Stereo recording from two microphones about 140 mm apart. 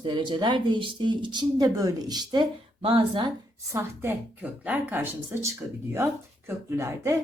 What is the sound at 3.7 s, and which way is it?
Speech, 20° right (ahead or behind).